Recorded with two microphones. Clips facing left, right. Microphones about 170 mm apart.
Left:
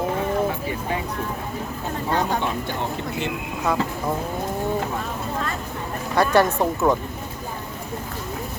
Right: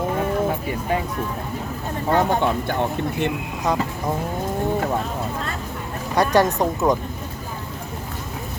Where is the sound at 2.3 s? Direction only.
55° right (ahead or behind).